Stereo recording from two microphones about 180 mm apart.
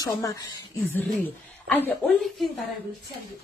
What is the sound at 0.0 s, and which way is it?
Speech, 20° left (ahead or behind).